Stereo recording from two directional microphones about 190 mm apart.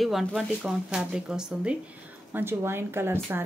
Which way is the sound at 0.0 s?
Centre (ahead or behind).